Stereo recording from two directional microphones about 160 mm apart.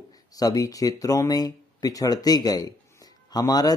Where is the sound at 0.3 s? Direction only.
25° left (ahead or behind).